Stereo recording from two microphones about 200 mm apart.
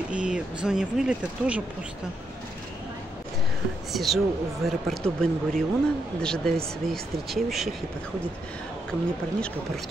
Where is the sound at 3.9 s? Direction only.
Centre (ahead or behind).